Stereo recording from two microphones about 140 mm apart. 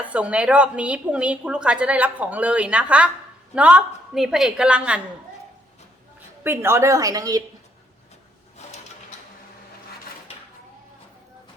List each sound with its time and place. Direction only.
0.0 s a woman's voice: 10° right (ahead or behind)
6.4 s a woman's voice: 15° right (ahead or behind)